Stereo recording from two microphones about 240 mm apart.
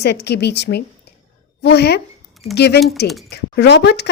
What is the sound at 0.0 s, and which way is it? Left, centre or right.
A woman's voice, left.